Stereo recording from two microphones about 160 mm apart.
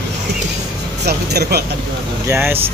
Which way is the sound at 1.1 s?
90° right.